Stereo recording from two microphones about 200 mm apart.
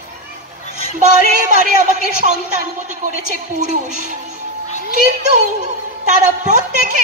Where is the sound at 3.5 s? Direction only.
35° right (ahead or behind).